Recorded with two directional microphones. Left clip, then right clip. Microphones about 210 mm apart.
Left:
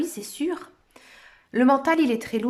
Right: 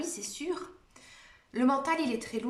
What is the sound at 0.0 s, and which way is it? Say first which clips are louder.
Speech: left 9 dB; 35° left (ahead or behind).